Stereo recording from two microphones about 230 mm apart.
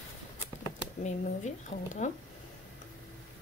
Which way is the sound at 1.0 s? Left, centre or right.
Left.